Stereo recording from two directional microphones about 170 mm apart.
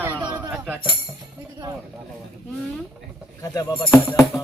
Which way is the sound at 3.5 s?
30° left (ahead or behind).